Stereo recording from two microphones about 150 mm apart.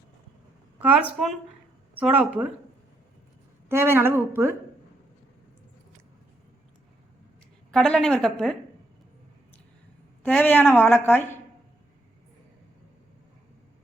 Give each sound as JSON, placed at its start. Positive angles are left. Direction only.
{"t": 0.8, "sound": "a woman's voice", "side_deg": -10}
{"t": 3.7, "sound": "a woman's voice", "side_deg": -15}
{"t": 7.7, "sound": "a woman's voice", "side_deg": 5}
{"t": 10.2, "sound": "a woman's voice", "side_deg": 10}